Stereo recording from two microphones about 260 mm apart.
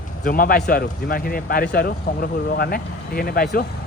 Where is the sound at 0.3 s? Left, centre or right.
Left.